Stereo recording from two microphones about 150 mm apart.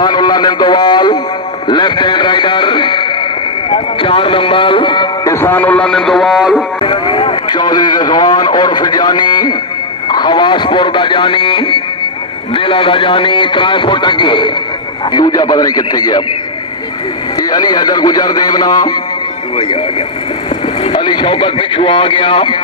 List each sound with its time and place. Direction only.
0.0 s a man's voice: 30° left (ahead or behind)
1.7 s music: 30° left (ahead or behind)
3.7 s speech: 35° left (ahead or behind)
5.3 s a man's voice: 15° left (ahead or behind); by 6.6 s centre (ahead or behind)
6.8 s a man's voice: 35° left (ahead or behind)
17.4 s a man's voice: 25° left (ahead or behind)
20.8 s speech: 30° left (ahead or behind)